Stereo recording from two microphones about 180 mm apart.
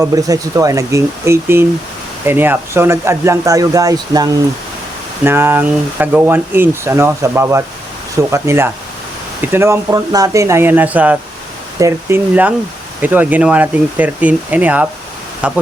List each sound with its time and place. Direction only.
0.0 s speech: 20° right (ahead or behind)